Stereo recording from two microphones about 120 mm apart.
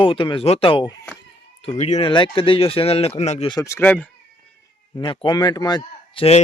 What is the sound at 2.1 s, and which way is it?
Speech, 45° left (ahead or behind).